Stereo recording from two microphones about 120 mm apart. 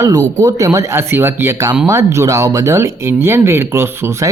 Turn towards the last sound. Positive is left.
turn(degrees=-20)  # may be behind; listen again after turning